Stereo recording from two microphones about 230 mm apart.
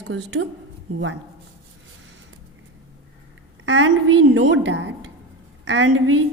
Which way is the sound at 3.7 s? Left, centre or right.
Right.